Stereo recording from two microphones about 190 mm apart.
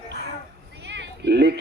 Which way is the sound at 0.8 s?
65° right (ahead or behind).